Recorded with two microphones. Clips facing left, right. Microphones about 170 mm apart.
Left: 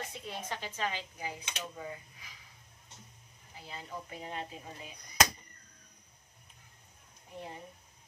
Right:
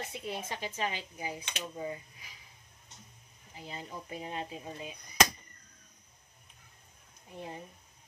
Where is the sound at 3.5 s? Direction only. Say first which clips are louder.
Right 1 dB; 20° right (ahead or behind).